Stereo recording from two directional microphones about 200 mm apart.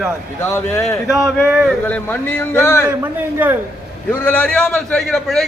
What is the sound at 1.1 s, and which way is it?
Speech, 5° right (ahead or behind).